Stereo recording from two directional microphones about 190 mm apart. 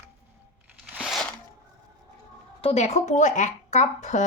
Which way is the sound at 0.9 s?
Centre (ahead or behind).